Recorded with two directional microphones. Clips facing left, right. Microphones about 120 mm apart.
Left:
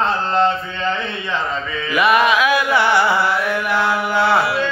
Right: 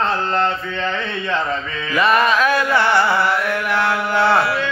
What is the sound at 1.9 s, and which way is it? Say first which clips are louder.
Carnatic music: left 1 dB; 10° left (ahead or behind).